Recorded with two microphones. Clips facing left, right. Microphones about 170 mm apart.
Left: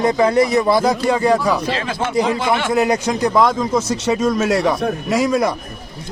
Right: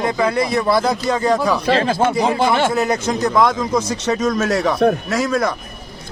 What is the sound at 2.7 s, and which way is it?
A man's voice, 15° left (ahead or behind).